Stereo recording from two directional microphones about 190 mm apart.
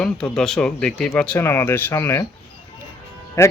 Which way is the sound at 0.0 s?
5° left (ahead or behind).